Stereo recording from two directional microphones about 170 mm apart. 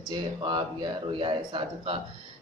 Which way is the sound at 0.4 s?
25° right (ahead or behind).